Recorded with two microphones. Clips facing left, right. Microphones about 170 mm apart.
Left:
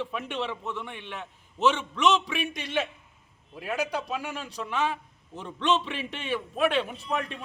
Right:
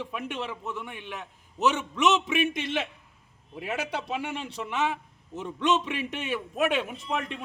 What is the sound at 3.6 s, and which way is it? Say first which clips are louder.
A man's voice: left 2 dB; 25° right (ahead or behind).